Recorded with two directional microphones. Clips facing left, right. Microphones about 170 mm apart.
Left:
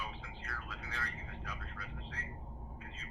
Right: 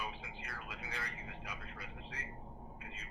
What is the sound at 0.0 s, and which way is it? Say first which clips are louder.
Music: right 1 dB; 15° right (ahead or behind).